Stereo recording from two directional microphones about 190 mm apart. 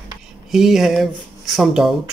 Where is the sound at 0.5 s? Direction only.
Centre (ahead or behind).